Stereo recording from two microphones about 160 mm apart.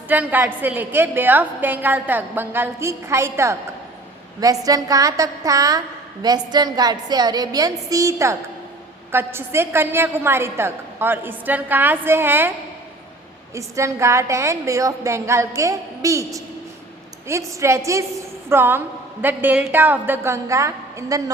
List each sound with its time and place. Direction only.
0.1 s a woman's voice: 10° right (ahead or behind)
4.6 s a woman's voice: 20° right (ahead or behind)
13.5 s a woman's voice: 20° right (ahead or behind)